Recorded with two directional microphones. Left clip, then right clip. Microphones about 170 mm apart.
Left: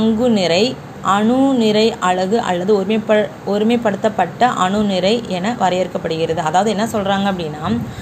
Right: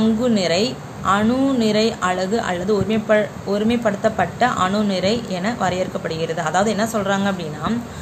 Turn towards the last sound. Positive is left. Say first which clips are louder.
# left 3 dB
turn(degrees=10)  # may be behind; listen again after turning